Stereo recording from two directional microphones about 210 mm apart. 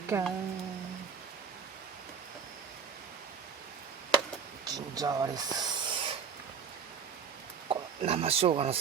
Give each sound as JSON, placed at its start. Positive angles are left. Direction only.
{"t": 0.1, "sound": "speech", "side_deg": -10}
{"t": 4.6, "sound": "hiss", "side_deg": -20}
{"t": 7.7, "sound": "speech", "side_deg": -25}